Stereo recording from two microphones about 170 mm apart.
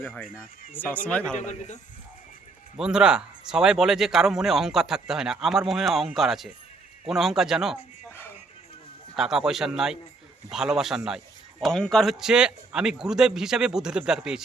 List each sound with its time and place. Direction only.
0.9 s speech: 10° left (ahead or behind)
1.4 s a man's voice: 45° left (ahead or behind)
2.7 s speech: 5° right (ahead or behind)
9.1 s speech: 5° right (ahead or behind)